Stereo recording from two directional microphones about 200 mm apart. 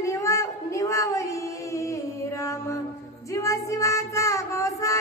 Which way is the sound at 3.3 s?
15° left (ahead or behind).